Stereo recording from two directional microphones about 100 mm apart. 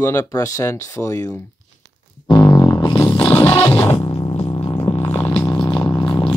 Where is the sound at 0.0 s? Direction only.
35° left (ahead or behind).